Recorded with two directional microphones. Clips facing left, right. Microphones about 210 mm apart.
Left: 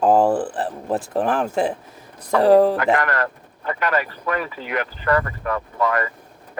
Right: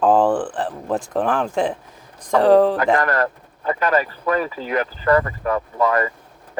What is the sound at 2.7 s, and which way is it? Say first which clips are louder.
Speech: right 2 dB; 35° right (ahead or behind).